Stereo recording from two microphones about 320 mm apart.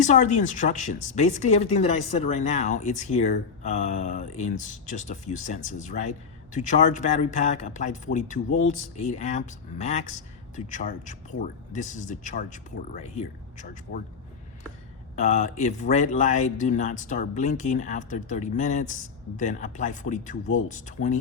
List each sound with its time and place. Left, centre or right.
0.0 s speech: left
15.1 s speech: left